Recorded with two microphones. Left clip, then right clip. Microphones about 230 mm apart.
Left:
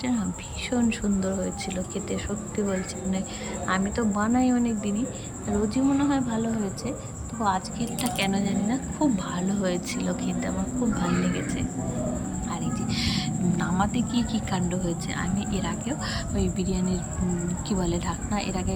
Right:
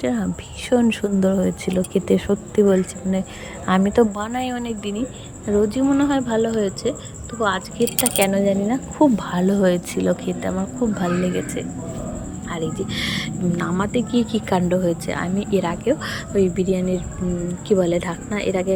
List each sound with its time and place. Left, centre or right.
0.0 s a woman's voice: centre
0.7 s a woman's voice: right; by 7.9 s centre
8.0 s speech: right
12.5 s a woman's voice: centre